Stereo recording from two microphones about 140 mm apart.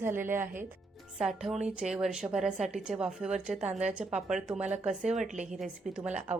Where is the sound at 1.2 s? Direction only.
5° right (ahead or behind).